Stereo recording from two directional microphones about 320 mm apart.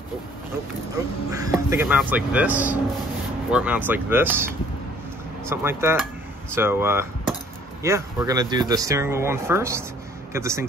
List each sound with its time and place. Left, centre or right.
1.3 s speech: centre